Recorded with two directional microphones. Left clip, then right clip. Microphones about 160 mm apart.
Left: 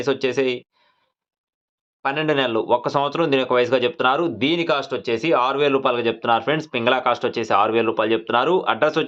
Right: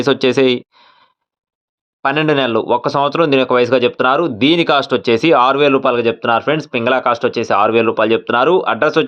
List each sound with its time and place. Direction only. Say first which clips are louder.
0.0 s speech: right 8 dB; 55° right (ahead or behind)
2.0 s speech: right 6 dB; 50° right (ahead or behind); by 4.4 s 30° right (ahead or behind)
4.4 s speech: right 10 dB; 50° right (ahead or behind); by 9.0 s 30° right (ahead or behind)